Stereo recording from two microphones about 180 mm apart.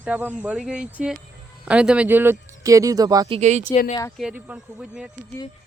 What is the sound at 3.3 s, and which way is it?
Speech, 40° right (ahead or behind).